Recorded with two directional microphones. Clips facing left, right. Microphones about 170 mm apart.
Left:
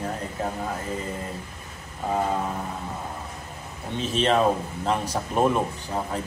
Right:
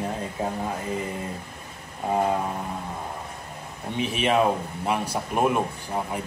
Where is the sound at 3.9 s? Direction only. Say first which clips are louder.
Even; 15° right (ahead or behind).